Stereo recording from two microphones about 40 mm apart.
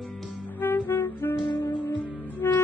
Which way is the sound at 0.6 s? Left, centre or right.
Left.